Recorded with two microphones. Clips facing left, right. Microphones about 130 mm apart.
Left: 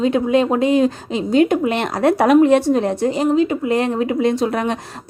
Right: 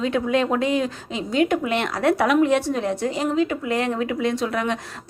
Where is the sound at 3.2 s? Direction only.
25° left (ahead or behind).